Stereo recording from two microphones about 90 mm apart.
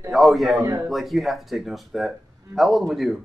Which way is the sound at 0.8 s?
Centre (ahead or behind).